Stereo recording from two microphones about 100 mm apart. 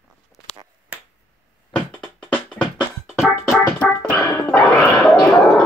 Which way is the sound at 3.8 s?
10° left (ahead or behind).